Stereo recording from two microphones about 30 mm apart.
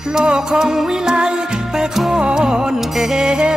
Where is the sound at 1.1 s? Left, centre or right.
Right.